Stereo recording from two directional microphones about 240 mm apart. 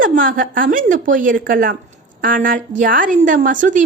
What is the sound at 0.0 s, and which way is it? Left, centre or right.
A woman's voice, right.